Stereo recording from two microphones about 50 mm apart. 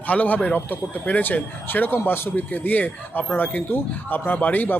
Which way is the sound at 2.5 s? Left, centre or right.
Left.